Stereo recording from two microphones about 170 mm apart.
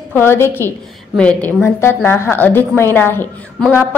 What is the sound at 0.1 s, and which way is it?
A woman's voice, 15° left (ahead or behind).